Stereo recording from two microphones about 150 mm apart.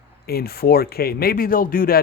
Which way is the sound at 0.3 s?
90° left.